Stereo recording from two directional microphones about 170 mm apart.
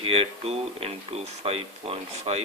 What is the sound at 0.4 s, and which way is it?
Speech, 35° right (ahead or behind).